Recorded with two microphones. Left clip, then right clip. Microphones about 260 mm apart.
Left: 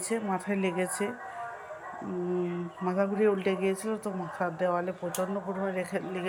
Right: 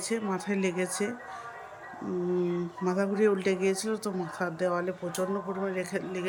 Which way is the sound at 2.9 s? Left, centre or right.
Centre.